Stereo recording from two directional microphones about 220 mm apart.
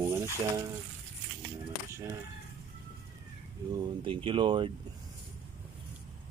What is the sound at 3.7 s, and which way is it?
Speech, 20° right (ahead or behind).